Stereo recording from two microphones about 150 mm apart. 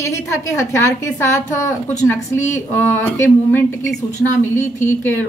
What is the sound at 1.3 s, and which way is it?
A woman's voice, 20° left (ahead or behind).